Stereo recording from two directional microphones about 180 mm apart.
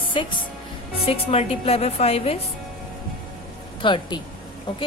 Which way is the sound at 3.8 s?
25° left (ahead or behind).